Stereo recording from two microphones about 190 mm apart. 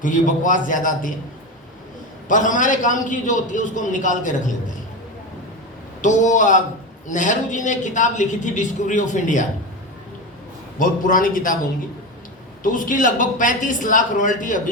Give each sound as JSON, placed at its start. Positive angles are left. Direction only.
{"t": 0.0, "sound": "a man's voice", "side_deg": 45}
{"t": 2.2, "sound": "a man's voice", "side_deg": 45}
{"t": 6.0, "sound": "a man's voice", "side_deg": 40}
{"t": 10.8, "sound": "a man's voice", "side_deg": 45}
{"t": 12.6, "sound": "a man's voice", "side_deg": 45}